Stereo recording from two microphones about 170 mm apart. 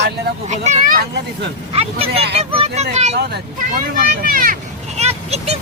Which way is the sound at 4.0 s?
55° right (ahead or behind).